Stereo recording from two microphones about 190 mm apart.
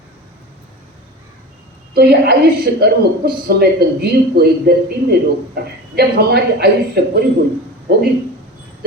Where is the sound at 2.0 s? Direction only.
55° right (ahead or behind).